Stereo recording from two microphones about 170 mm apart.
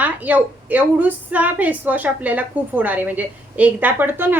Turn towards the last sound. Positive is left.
turn(degrees=-10)  # may be behind; listen again after turning